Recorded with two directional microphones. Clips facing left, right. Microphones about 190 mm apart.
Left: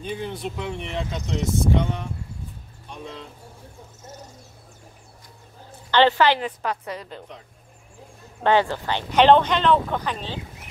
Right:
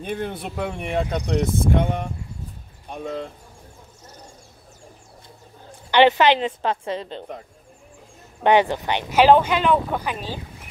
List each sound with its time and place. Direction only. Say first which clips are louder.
0.0 s speech: right 2 dB; 55° right (ahead or behind)
5.9 s a woman's voice: right 2 dB; 15° right (ahead or behind)
8.4 s speech: right 2 dB; 15° right (ahead or behind)